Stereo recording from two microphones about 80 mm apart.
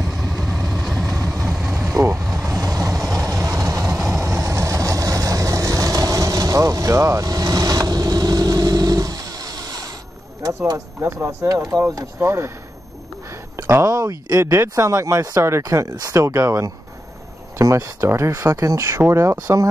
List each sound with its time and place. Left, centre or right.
0.2 s vehicle: centre
1.1 s vehicle: right
1.4 s vehicle: centre
1.8 s vehicle: right
11.2 s speech: right
12.2 s speech: right
13.7 s speech: right
13.9 s speech: right
14.4 s speech: right